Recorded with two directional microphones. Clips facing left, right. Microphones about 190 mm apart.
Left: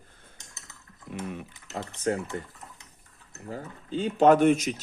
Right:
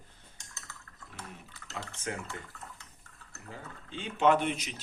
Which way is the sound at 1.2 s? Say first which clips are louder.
Left 12 dB; 70° left (ahead or behind).